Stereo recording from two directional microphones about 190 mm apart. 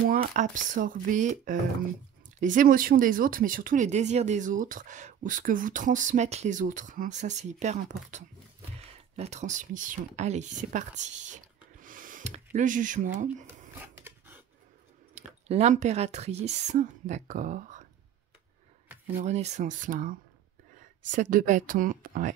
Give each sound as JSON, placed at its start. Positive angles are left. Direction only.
{"t": 0.0, "sound": "speech", "side_deg": -50}
{"t": 13.7, "sound": "a sound", "side_deg": -10}
{"t": 15.1, "sound": "speech", "side_deg": -35}
{"t": 19.0, "sound": "speech", "side_deg": -40}